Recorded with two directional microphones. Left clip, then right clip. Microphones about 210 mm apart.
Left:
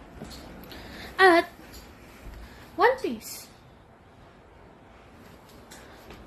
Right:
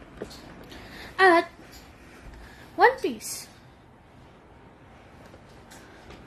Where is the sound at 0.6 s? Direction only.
10° right (ahead or behind).